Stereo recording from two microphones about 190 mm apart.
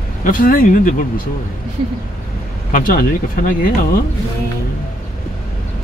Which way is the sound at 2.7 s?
50° left (ahead or behind).